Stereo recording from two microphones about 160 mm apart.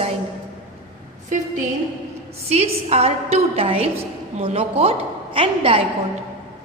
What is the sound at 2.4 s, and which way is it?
A woman's voice, 40° right (ahead or behind).